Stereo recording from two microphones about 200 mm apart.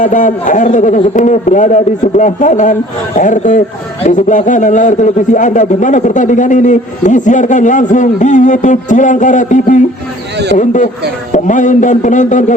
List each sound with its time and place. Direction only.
0.0 s a man's voice: 40° left (ahead or behind)